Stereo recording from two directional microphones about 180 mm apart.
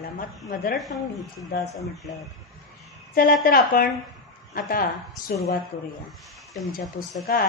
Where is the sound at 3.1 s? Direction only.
55° left (ahead or behind).